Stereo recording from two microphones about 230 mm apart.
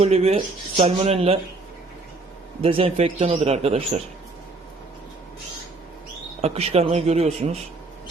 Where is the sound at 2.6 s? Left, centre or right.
Right.